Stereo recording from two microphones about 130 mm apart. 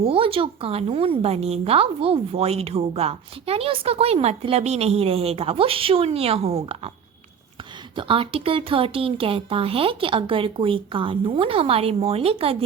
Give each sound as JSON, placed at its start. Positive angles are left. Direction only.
{"t": 0.0, "sound": "a woman's voice", "side_deg": -45}
{"t": 7.9, "sound": "a woman's voice", "side_deg": -40}